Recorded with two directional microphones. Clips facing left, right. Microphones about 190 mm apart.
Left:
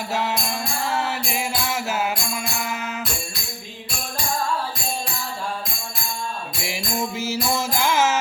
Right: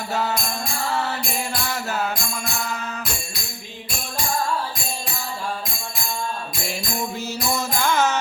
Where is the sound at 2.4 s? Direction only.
20° left (ahead or behind).